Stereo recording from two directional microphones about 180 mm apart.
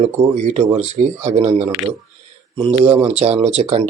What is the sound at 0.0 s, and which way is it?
Speech, 35° right (ahead or behind).